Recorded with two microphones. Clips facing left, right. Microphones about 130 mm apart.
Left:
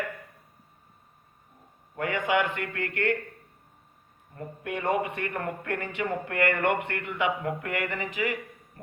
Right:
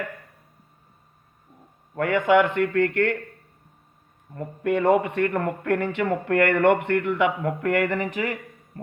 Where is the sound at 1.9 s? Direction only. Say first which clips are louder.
Right 7 dB; 50° right (ahead or behind).